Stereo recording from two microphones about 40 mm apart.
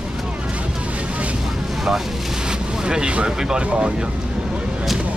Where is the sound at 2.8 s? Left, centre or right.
Right.